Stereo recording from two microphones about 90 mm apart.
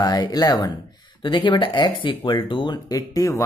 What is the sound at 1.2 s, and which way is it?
Speech, 65° left (ahead or behind).